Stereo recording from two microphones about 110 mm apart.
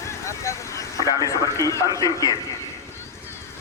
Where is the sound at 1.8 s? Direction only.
35° right (ahead or behind).